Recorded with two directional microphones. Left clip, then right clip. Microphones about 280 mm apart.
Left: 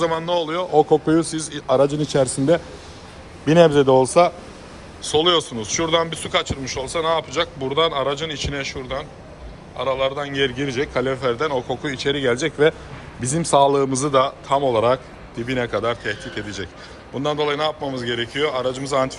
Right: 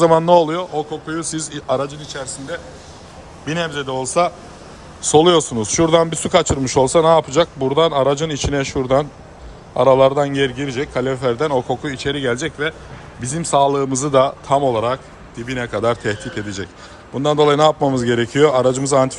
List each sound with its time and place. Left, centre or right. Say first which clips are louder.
0.0 s a man's voice: right 9 dB; centre
3.4 s a man's voice: left 9 dB; centre
5.0 s a man's voice: right 5 dB; centre